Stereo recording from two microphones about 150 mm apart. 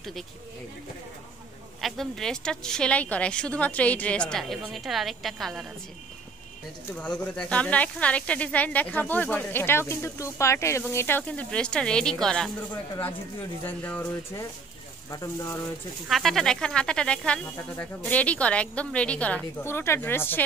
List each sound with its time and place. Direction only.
1.8 s a woman's voice: centre (ahead or behind)
6.9 s speech: 5° left (ahead or behind)
13.7 s speech: 10° left (ahead or behind)
15.0 s speech: 25° left (ahead or behind)
16.1 s speech: centre (ahead or behind)